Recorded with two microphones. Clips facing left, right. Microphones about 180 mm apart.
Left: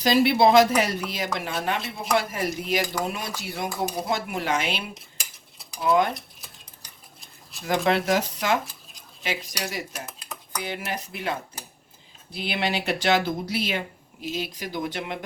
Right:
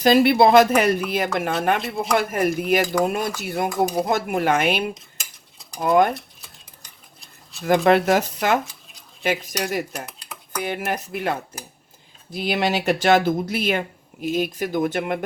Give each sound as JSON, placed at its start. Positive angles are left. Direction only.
{"t": 0.0, "sound": "speech", "side_deg": -55}
{"t": 7.6, "sound": "speech", "side_deg": -55}